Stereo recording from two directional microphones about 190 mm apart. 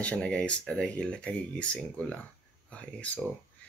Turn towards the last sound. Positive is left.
turn(degrees=5)  # may be behind; listen again after turning